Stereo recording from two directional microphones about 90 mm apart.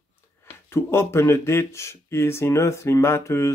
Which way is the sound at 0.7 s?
30° left (ahead or behind).